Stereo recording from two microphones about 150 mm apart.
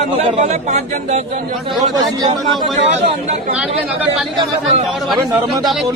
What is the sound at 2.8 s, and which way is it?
Speech, 45° right (ahead or behind).